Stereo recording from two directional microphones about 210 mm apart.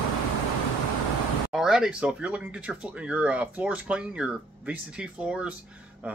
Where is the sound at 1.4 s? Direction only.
5° right (ahead or behind).